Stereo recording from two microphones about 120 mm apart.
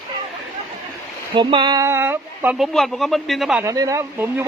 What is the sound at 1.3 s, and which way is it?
Speech, 40° right (ahead or behind).